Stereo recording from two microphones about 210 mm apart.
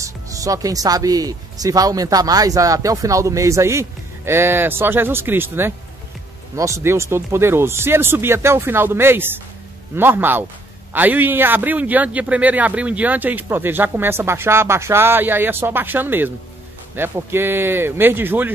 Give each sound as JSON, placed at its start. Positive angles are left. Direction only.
{"t": 0.0, "sound": "speech", "side_deg": -15}